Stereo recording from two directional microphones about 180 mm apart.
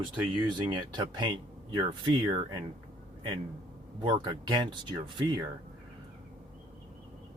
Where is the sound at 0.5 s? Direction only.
25° right (ahead or behind).